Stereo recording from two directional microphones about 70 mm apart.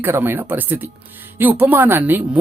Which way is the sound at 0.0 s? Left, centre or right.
Right.